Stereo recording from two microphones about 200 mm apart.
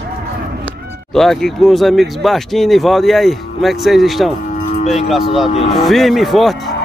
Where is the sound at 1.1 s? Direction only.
Centre (ahead or behind).